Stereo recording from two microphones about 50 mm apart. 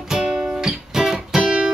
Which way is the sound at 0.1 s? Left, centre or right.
Centre.